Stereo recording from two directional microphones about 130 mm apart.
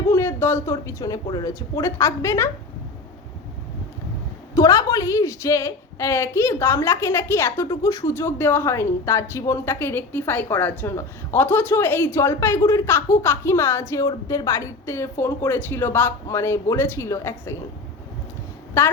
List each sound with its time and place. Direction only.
0.1 s a woman's voice: 20° left (ahead or behind)
4.5 s a woman's voice: 25° left (ahead or behind)
18.8 s a woman's voice: 20° left (ahead or behind)